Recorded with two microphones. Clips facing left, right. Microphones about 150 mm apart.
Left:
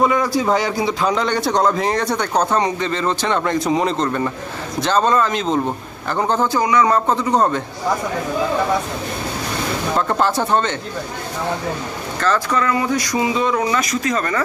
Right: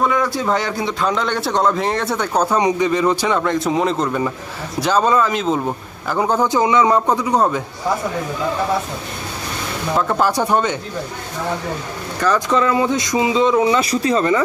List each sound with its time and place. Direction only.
0.0 s a man's voice: 5° left (ahead or behind)
9.9 s a man's voice: centre (ahead or behind)
12.2 s speech: 15° right (ahead or behind)